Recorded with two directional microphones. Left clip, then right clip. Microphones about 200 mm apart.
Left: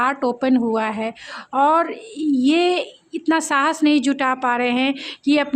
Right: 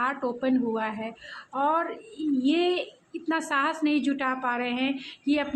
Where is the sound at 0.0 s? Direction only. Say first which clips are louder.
Left 8 dB; 50° left (ahead or behind).